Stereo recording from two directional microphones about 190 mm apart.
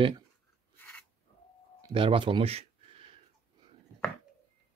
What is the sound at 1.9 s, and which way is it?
Speech, 25° right (ahead or behind).